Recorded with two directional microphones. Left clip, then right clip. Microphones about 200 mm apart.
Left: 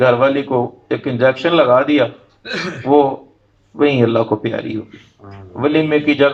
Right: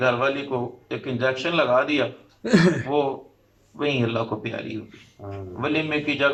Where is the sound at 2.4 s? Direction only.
40° right (ahead or behind).